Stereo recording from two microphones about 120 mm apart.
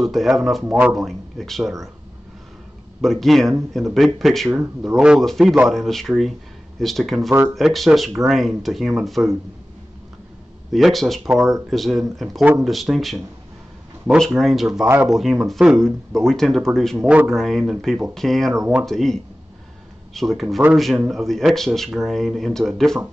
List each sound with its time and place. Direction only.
0.0 s speech: centre (ahead or behind)
3.0 s speech: centre (ahead or behind)
7.2 s speech: 20° right (ahead or behind)
7.5 s speech: centre (ahead or behind)
10.7 s speech: centre (ahead or behind)
20.2 s speech: centre (ahead or behind)